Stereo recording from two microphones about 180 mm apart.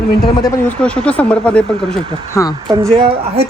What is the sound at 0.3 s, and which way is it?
A woman's voice, 20° left (ahead or behind).